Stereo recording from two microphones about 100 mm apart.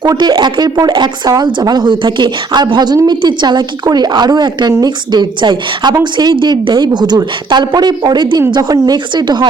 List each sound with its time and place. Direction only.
0.0 s speech: 45° right (ahead or behind)